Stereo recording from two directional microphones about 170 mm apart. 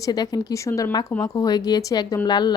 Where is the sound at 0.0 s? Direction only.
25° left (ahead or behind).